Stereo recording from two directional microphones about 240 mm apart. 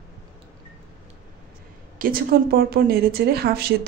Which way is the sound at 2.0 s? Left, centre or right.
Right.